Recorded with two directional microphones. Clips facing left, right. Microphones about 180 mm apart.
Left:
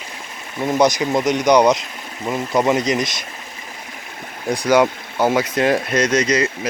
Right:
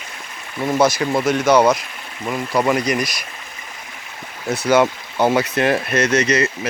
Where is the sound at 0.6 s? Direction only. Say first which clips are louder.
Left 1 dB; 20° left (ahead or behind).